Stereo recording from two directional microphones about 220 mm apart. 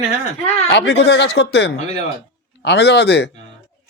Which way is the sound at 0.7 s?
50° left (ahead or behind).